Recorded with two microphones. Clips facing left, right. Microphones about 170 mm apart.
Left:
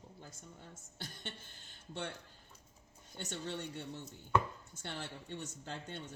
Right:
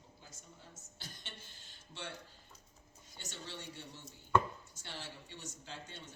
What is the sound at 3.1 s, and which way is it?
Speech, 55° left (ahead or behind).